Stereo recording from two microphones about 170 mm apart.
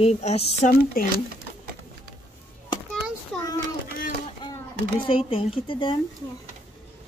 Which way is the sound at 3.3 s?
Centre (ahead or behind).